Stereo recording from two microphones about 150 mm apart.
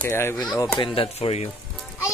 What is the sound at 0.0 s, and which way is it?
Speech, 15° left (ahead or behind).